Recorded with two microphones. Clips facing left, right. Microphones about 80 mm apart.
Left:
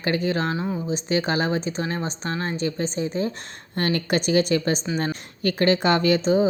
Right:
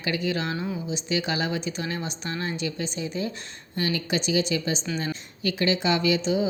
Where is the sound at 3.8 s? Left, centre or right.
Left.